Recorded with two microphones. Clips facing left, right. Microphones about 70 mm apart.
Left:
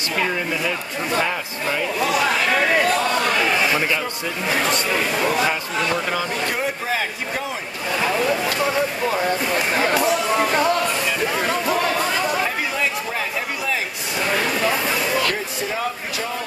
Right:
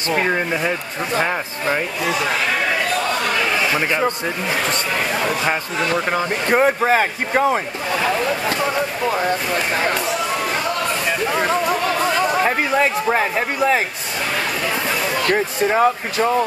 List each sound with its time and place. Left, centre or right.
0.1 s speech: right
6.0 s speech: right
8.5 s speech: centre
9.1 s speech: right
11.2 s chatter: right
12.4 s a sound: right
15.7 s speech: right